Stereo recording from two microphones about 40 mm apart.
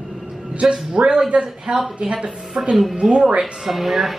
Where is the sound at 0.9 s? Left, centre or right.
Right.